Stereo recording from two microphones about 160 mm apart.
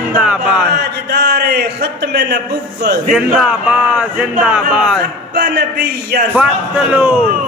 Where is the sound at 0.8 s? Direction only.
90° right.